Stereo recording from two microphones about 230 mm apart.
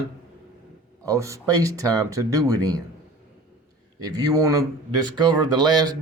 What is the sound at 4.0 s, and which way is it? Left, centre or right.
Speech, centre.